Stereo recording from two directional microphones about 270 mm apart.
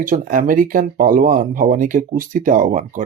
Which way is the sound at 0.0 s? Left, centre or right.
Right.